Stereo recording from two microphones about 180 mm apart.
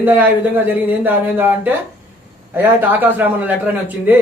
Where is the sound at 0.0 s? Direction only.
10° right (ahead or behind).